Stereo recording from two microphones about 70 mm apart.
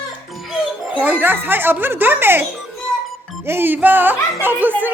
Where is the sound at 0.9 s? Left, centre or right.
Right.